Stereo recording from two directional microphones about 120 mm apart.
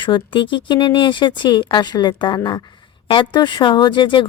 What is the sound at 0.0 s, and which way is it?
Speech, 45° left (ahead or behind).